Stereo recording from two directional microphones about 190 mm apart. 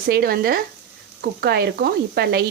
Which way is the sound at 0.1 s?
55° right (ahead or behind).